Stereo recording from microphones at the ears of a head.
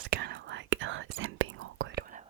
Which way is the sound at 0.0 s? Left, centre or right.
Right.